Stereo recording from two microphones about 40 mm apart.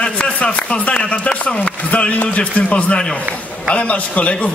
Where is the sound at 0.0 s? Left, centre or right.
Left.